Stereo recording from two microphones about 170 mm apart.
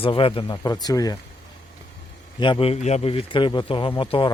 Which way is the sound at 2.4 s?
30° left (ahead or behind).